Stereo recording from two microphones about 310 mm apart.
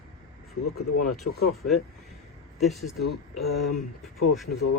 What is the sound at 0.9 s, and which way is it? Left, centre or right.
Speech, left.